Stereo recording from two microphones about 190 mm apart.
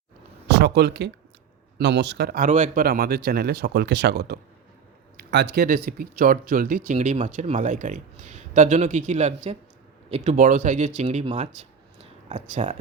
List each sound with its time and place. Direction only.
0.4 s speech: 65° right (ahead or behind)
5.1 s speech: 65° right (ahead or behind); by 12.7 s 40° right (ahead or behind)